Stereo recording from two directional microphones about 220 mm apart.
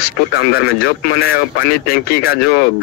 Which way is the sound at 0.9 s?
45° left (ahead or behind).